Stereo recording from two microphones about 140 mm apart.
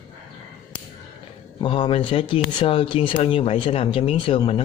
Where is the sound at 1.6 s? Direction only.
40° left (ahead or behind).